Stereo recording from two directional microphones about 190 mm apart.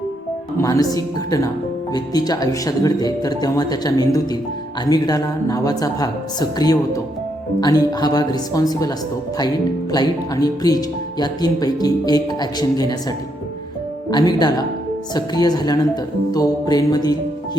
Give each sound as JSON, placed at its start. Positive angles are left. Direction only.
{"t": 0.5, "sound": "speech", "side_deg": 20}
{"t": 1.9, "sound": "speech", "side_deg": 20}
{"t": 9.9, "sound": "speech", "side_deg": 20}